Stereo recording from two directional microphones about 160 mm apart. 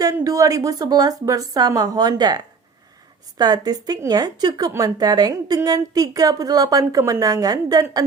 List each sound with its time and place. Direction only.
0.0 s a woman's voice: 20° right (ahead or behind)